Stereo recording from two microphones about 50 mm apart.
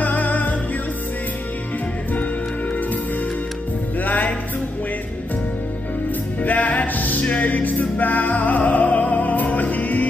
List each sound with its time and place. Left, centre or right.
0.0 s music: left
4.0 s music: left
6.4 s music: left